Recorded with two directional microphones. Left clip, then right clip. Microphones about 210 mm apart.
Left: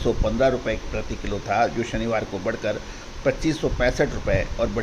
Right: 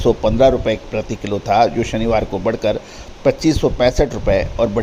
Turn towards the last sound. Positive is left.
turn(degrees=-35)  # may be behind; listen again after turning